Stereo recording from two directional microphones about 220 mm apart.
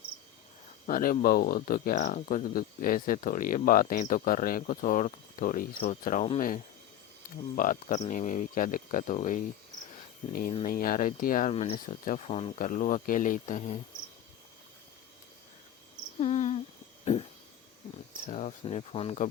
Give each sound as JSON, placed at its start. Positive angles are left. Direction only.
{"t": 0.9, "sound": "speech", "side_deg": 40}
{"t": 7.5, "sound": "speech", "side_deg": 35}
{"t": 10.2, "sound": "speech", "side_deg": 25}
{"t": 10.7, "sound": "speech", "side_deg": 40}
{"t": 16.2, "sound": "cricket", "side_deg": 30}
{"t": 18.3, "sound": "speech", "side_deg": 30}